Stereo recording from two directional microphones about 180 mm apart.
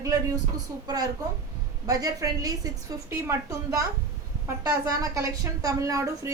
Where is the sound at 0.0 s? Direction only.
20° right (ahead or behind).